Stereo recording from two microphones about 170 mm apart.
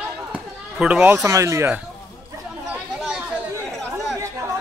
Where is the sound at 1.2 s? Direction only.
20° right (ahead or behind).